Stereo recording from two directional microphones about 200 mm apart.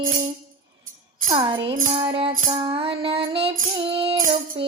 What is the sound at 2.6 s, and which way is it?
Female singing, 25° right (ahead or behind).